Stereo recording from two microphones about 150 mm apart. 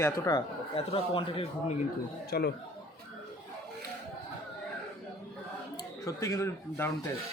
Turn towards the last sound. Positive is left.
turn(degrees=20)  # may be behind; listen again after turning